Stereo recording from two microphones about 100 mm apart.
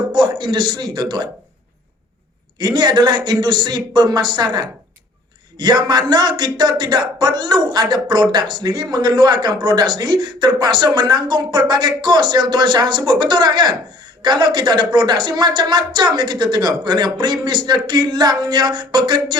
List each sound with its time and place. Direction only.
0.1 s a man's voice: 45° right (ahead or behind)
2.6 s speech: 45° right (ahead or behind)